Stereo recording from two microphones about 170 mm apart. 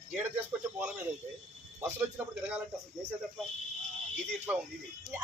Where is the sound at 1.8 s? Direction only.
10° right (ahead or behind).